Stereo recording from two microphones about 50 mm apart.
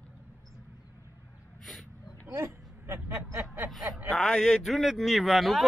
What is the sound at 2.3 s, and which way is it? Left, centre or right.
Speech, right.